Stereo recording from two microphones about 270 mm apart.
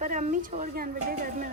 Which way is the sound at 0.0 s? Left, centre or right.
Right.